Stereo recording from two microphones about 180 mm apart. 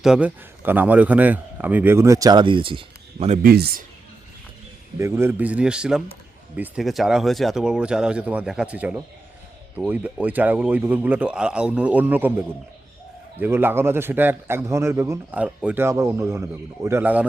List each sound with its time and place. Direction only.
0.0 s a man's voice: 5° right (ahead or behind); by 3.4 s 35° right (ahead or behind)
3.4 s a man's voice: 60° right (ahead or behind)
4.9 s a man's voice: 15° right (ahead or behind)